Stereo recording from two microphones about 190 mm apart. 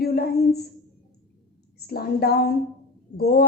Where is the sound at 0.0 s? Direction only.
55° left (ahead or behind).